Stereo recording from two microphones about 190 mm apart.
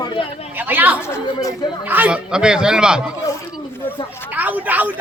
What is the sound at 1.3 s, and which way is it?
Speech, 25° left (ahead or behind).